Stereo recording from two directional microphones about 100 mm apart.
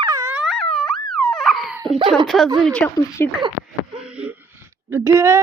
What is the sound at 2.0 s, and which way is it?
Speech, 55° right (ahead or behind).